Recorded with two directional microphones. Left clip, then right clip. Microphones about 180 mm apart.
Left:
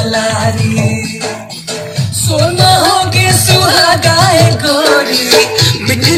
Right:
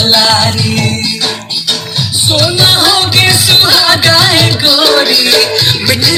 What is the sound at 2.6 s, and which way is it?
Music, 60° left (ahead or behind).